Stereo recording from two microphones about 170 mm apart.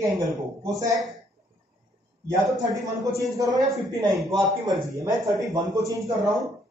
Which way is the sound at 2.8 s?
20° right (ahead or behind).